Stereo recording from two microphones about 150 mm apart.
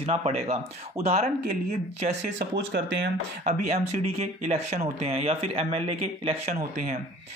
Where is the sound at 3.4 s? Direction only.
50° right (ahead or behind).